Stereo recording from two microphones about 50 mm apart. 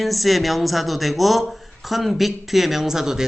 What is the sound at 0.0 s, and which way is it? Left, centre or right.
Speech, centre.